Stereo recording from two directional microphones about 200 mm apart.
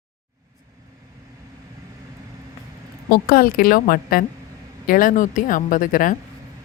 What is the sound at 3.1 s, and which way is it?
Speech, 45° left (ahead or behind).